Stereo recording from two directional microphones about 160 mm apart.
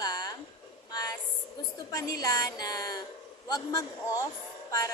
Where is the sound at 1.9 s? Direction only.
25° left (ahead or behind).